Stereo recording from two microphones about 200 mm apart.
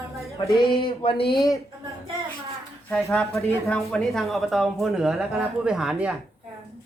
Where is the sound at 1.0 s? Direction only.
25° left (ahead or behind).